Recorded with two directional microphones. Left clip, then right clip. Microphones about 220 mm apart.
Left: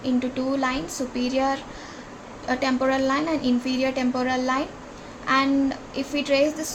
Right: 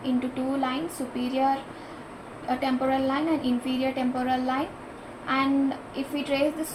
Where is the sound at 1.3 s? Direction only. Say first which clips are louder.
Right 1 dB; 40° left (ahead or behind).